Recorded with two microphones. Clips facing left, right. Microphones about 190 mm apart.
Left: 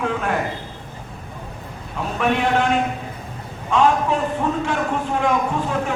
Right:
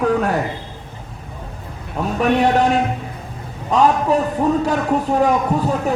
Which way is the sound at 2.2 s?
40° right (ahead or behind).